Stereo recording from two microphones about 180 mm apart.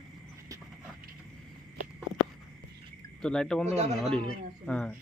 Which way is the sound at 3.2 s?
5° left (ahead or behind).